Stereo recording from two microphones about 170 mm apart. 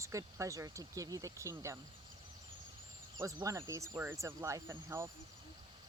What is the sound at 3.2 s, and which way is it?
Speech, 20° right (ahead or behind).